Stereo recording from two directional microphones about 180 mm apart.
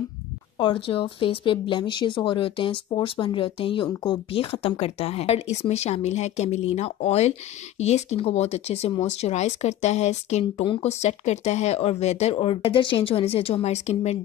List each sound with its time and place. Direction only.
0.6 s speech: 30° left (ahead or behind)